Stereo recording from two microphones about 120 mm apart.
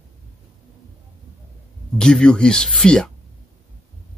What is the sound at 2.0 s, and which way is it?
Speech, 5° left (ahead or behind).